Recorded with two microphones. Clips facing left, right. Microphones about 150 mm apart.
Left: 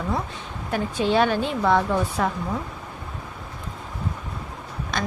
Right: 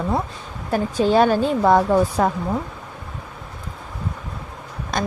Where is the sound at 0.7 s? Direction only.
40° right (ahead or behind).